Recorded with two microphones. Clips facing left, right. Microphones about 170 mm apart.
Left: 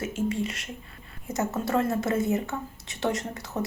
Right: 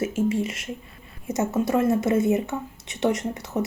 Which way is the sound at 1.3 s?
20° right (ahead or behind).